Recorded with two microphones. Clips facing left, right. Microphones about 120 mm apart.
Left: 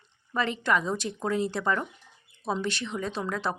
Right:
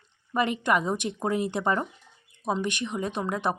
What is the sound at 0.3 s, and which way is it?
Speech, 15° right (ahead or behind).